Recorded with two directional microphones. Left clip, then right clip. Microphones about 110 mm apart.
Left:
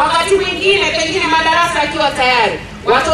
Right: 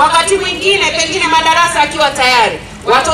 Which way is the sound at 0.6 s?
25° right (ahead or behind).